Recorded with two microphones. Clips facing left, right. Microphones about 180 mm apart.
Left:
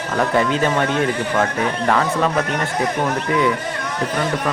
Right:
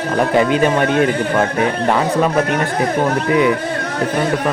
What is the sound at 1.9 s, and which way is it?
Speech, 15° right (ahead or behind).